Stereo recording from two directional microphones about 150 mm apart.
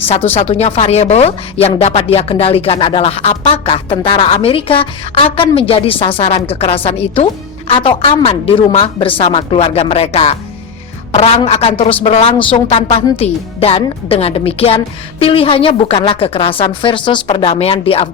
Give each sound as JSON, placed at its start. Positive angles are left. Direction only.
{"t": 0.1, "sound": "a woman's voice", "side_deg": 40}